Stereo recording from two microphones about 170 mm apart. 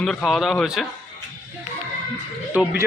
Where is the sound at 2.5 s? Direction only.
10° right (ahead or behind).